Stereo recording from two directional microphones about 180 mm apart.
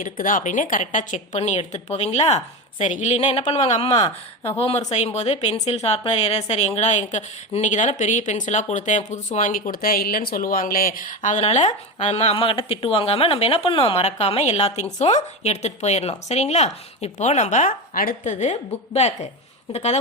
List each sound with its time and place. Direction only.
0.0 s speech: 50° left (ahead or behind)